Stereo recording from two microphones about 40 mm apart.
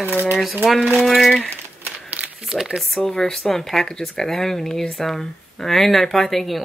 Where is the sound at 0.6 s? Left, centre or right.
Centre.